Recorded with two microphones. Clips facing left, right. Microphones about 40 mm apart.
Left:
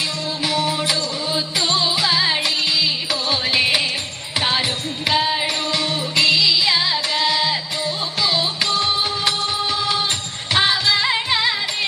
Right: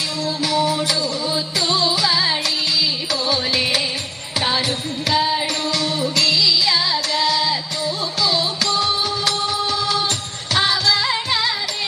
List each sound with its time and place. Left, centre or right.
0.4 s music: left
10.5 s music: left